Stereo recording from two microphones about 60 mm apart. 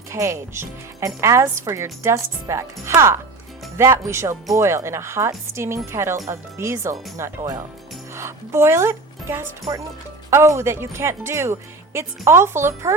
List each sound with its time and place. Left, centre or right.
0.1 s speech: right